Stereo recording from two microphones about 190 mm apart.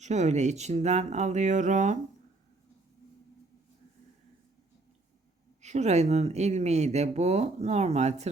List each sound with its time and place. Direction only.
0.0 s speech: 35° right (ahead or behind)
5.6 s speech: 35° right (ahead or behind)